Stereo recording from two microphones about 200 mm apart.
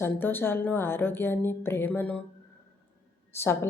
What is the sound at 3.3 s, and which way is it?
Speech, 10° left (ahead or behind).